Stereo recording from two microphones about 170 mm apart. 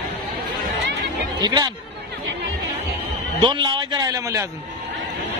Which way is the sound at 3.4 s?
25° right (ahead or behind).